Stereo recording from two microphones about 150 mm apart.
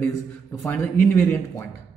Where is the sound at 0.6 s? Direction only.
10° left (ahead or behind).